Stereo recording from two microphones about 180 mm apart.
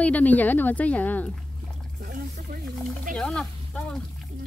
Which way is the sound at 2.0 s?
50° right (ahead or behind).